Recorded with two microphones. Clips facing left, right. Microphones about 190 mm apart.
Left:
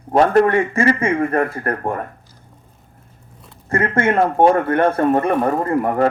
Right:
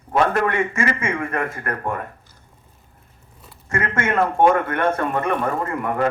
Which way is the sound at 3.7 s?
35° left (ahead or behind).